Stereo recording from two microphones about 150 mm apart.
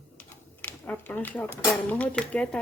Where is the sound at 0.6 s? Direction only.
15° left (ahead or behind).